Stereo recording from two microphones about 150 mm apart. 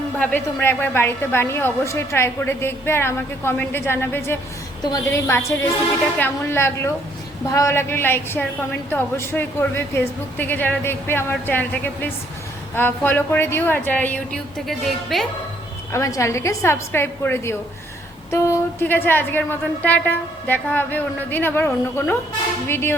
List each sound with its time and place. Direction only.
0.2 s a woman's voice: 10° left (ahead or behind)
15.9 s a woman's voice: 20° left (ahead or behind)